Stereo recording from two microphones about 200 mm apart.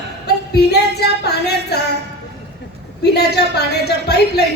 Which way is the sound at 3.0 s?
55° left (ahead or behind).